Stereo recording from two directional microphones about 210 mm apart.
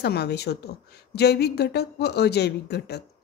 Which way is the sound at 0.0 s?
50° left (ahead or behind).